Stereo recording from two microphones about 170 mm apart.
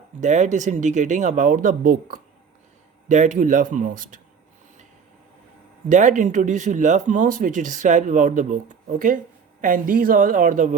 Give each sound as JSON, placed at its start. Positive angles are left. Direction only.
{"t": 0.2, "sound": "speech", "side_deg": -45}
{"t": 5.9, "sound": "speech", "side_deg": -50}